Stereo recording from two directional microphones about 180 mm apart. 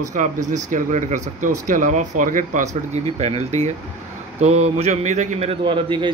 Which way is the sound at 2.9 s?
40° right (ahead or behind).